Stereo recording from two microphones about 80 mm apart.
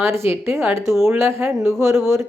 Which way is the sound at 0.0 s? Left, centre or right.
Right.